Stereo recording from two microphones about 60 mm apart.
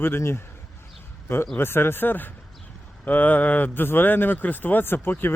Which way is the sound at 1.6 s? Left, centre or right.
Left.